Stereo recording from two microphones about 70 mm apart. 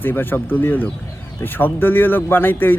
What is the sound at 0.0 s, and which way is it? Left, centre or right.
Speech, left.